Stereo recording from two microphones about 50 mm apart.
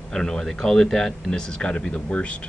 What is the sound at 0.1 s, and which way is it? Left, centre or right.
Speech, centre.